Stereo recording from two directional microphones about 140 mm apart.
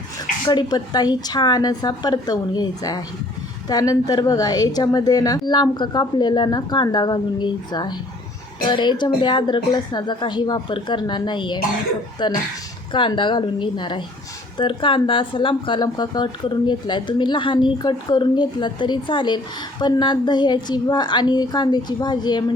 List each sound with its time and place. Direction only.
0.4 s a woman's voice: 30° left (ahead or behind)